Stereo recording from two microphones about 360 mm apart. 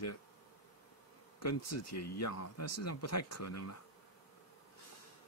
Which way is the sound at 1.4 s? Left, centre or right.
Left.